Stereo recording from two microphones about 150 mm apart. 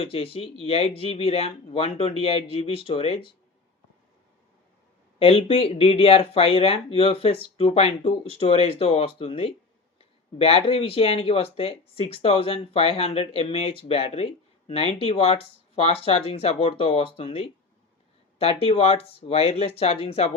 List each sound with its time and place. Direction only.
0.0 s speech: 40° left (ahead or behind)
5.2 s speech: 40° left (ahead or behind)